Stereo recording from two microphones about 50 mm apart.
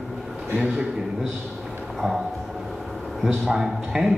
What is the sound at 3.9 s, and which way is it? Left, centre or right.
Speech, centre.